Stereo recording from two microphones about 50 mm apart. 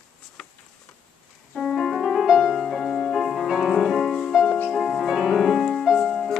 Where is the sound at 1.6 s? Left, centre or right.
Centre.